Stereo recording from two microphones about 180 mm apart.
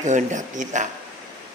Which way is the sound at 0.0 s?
45° right (ahead or behind).